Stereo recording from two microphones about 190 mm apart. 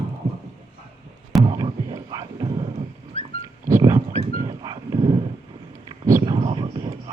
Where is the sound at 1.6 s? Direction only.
20° right (ahead or behind).